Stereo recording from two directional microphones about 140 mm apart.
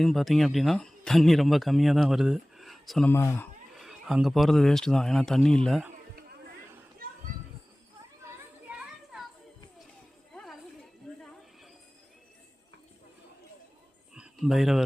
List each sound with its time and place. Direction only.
0.0 s speech: centre (ahead or behind)
3.1 s speech: 20° left (ahead or behind)
3.8 s speech: centre (ahead or behind)
10.3 s music: centre (ahead or behind)
11.2 s a sound: centre (ahead or behind)
14.1 s a sound: 5° right (ahead or behind)